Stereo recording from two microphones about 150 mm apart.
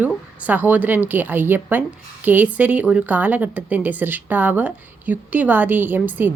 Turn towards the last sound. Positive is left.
turn(degrees=-10)  # may be behind; listen again after turning